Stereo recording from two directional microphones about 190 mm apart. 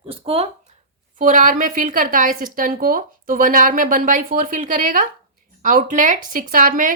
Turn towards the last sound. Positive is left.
turn(degrees=-45)  # may be behind; listen again after turning